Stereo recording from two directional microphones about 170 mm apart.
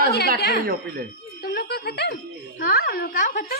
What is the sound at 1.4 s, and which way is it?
Music, 65° left (ahead or behind).